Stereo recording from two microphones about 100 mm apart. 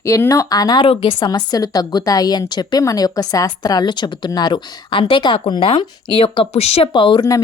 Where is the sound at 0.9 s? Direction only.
55° left (ahead or behind); by 6.8 s 90° left.